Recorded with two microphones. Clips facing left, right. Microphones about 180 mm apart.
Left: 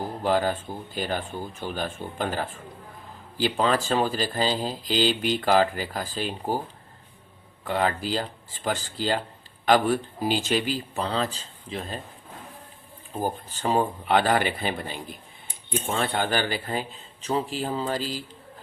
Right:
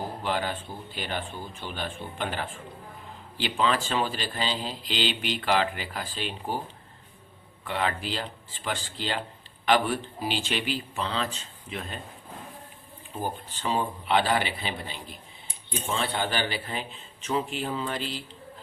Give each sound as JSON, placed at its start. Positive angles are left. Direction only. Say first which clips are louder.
{"t": 0.2, "sound": "speech", "louder": "left 8 dB", "side_deg": 40}
{"t": 7.6, "sound": "speech", "louder": "left 4 dB", "side_deg": 40}
{"t": 13.2, "sound": "speech", "louder": "left 4 dB", "side_deg": 45}